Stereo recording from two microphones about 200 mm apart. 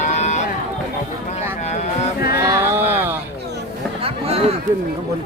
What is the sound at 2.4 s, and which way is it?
Speech, 15° right (ahead or behind).